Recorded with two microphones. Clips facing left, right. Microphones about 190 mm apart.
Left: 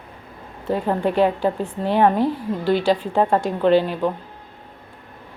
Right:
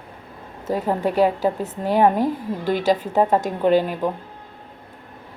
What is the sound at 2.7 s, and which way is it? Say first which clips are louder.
Speech: right 2 dB; 45° right (ahead or behind).